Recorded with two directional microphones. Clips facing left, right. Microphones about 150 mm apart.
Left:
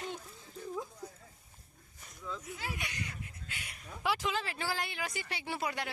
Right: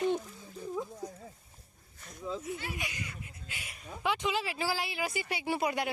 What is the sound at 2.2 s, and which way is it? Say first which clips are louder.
Speech: right 6 dB; 30° right (ahead or behind).